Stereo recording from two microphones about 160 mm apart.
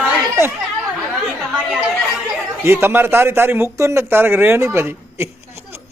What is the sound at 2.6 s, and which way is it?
Speech, 15° right (ahead or behind).